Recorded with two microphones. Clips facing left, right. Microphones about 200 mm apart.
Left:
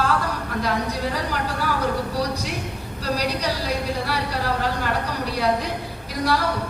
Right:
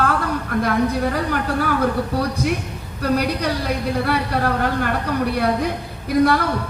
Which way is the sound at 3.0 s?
55° right (ahead or behind).